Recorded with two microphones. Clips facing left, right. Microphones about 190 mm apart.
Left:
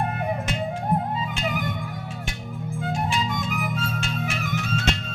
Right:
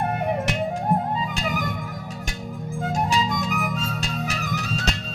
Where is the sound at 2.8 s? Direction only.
40° right (ahead or behind).